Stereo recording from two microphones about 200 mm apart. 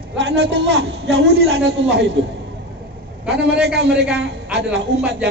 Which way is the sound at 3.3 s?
60° right (ahead or behind).